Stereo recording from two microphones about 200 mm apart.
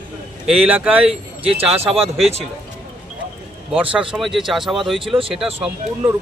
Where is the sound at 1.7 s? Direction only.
30° right (ahead or behind).